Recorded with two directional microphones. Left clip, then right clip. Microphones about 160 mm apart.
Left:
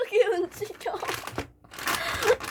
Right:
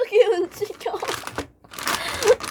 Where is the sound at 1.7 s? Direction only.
40° right (ahead or behind).